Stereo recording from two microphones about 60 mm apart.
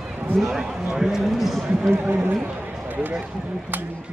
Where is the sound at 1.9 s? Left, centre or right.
Right.